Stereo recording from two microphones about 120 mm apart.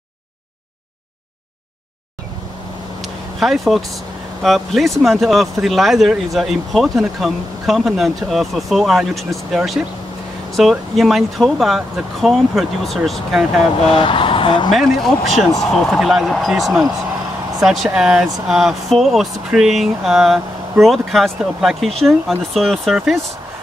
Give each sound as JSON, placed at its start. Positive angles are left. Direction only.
{"t": 3.0, "sound": "vehicle", "side_deg": 0}
{"t": 4.4, "sound": "speech", "side_deg": 0}
{"t": 13.9, "sound": "speech", "side_deg": 45}
{"t": 14.7, "sound": "speech", "side_deg": 0}